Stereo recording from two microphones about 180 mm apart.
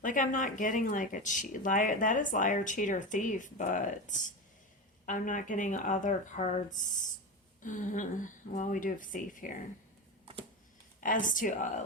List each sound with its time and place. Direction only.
0.0 s speech: 45° left (ahead or behind)
11.0 s speech: 45° left (ahead or behind)